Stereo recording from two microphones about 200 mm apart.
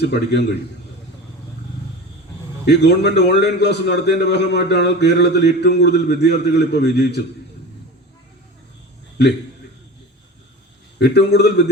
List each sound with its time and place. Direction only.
0.0 s a man's voice: 55° left (ahead or behind)
2.6 s a man's voice: 55° left (ahead or behind)
11.0 s a man's voice: 55° left (ahead or behind)